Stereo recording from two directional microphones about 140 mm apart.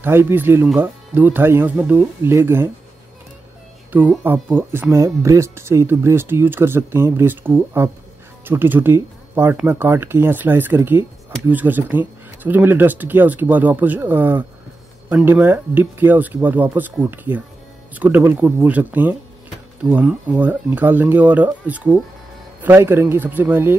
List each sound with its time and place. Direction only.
0.0 s speech: 15° right (ahead or behind)
4.2 s speech: 15° right (ahead or behind)